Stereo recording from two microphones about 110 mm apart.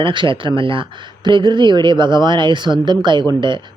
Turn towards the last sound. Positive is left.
turn(degrees=-45)  # may be behind; listen again after turning